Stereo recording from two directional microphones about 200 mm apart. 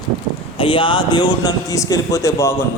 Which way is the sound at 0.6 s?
25° left (ahead or behind).